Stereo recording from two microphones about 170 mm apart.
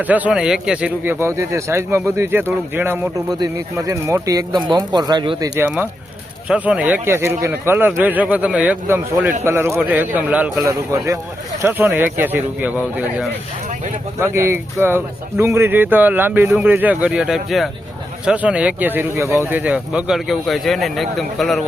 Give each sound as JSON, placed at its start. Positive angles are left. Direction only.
{"t": 0.0, "sound": "speech", "side_deg": -10}
{"t": 5.5, "sound": "speech", "side_deg": -10}
{"t": 14.2, "sound": "speech", "side_deg": -15}